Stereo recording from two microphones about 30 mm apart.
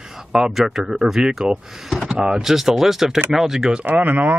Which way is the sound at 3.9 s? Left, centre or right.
Right.